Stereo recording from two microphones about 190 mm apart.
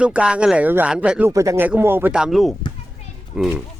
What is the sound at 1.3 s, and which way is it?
A man's voice, 15° right (ahead or behind).